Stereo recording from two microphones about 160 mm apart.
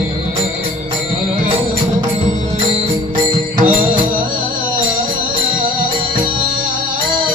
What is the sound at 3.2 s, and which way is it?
Music, 60° right (ahead or behind).